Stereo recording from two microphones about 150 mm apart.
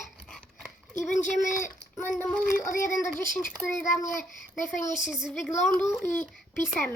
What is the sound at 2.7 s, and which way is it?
Speech, 60° left (ahead or behind).